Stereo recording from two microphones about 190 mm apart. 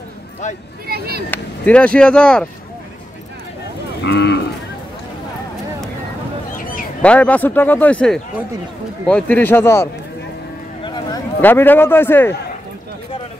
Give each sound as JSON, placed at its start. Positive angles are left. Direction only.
{"t": 0.8, "sound": "speech", "side_deg": -55}
{"t": 1.3, "sound": "speech", "side_deg": 5}
{"t": 4.0, "sound": "speech", "side_deg": 60}
{"t": 6.5, "sound": "a sound", "side_deg": 45}
{"t": 7.0, "sound": "speech", "side_deg": 5}
{"t": 11.4, "sound": "speech", "side_deg": 10}